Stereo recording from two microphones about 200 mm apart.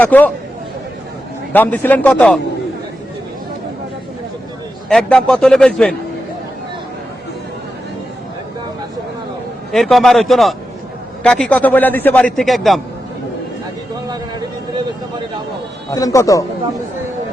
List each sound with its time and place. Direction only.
0.0 s a man's voice: 10° left (ahead or behind)
1.5 s a man's voice: 10° left (ahead or behind)
4.9 s a man's voice: 5° left (ahead or behind)
9.7 s a man's voice: centre (ahead or behind)
15.9 s a man's voice: 15° left (ahead or behind)